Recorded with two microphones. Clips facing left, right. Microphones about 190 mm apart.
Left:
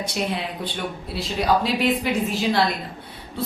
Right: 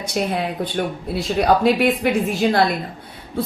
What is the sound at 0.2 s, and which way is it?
A woman's voice, 50° right (ahead or behind).